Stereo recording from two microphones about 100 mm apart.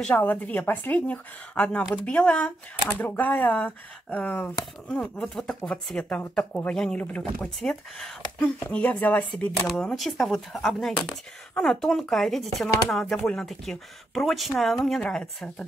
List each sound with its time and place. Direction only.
0.0 s speech: 15° left (ahead or behind)
4.8 s speech: 5° left (ahead or behind)
8.6 s speech: 15° left (ahead or behind)
9.7 s speech: 5° left (ahead or behind)